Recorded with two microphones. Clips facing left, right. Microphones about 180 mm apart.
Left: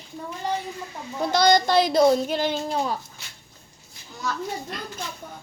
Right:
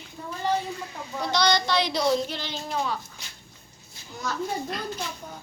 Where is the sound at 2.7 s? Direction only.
35° left (ahead or behind).